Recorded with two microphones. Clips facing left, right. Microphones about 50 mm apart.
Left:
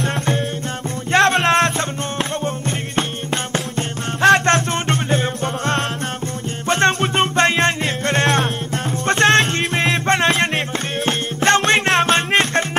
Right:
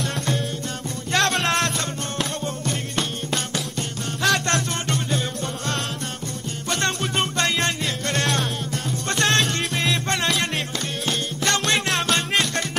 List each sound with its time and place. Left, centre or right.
0.0 s music: left
3.0 s music: left